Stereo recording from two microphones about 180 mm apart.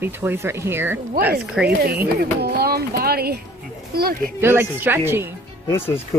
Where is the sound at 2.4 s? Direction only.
60° right (ahead or behind).